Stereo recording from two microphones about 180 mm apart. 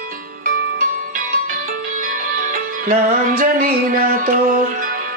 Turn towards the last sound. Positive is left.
turn(degrees=-50)  # may be behind; listen again after turning